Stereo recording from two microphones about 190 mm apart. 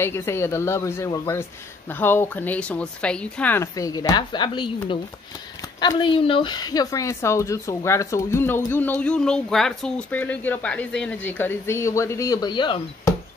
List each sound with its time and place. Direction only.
0.0 s speech: 15° left (ahead or behind)